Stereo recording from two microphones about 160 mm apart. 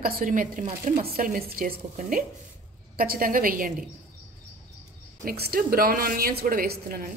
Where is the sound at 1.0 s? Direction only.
65° right (ahead or behind).